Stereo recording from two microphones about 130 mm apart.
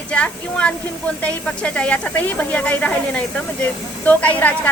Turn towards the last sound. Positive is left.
turn(degrees=10)  # may be behind; listen again after turning